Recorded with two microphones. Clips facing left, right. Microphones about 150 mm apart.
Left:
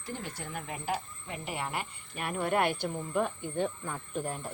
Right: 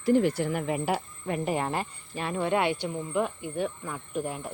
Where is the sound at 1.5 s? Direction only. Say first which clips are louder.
Right 4 dB; 40° right (ahead or behind).